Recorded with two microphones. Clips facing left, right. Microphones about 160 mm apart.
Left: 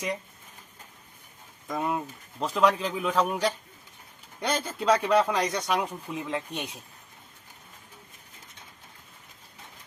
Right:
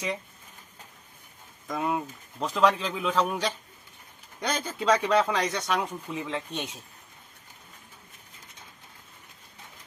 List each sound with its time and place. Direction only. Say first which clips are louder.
1.6 s speech: even; centre (ahead or behind)